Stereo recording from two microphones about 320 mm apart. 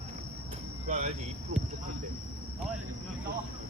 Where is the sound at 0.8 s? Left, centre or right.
Right.